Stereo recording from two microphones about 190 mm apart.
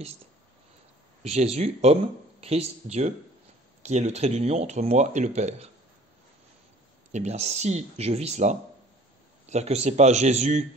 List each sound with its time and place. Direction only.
1.2 s speech: 35° right (ahead or behind)
7.1 s speech: 35° right (ahead or behind)